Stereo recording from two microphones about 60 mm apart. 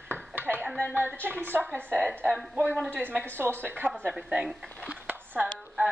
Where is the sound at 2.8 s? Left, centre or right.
Right.